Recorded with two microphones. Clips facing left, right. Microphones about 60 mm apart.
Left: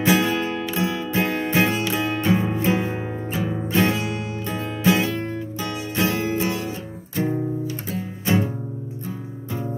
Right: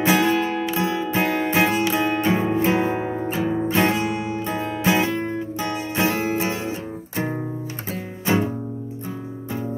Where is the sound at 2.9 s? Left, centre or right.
Right.